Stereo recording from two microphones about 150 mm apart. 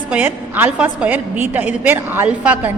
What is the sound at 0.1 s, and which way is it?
A woman's voice, 10° right (ahead or behind).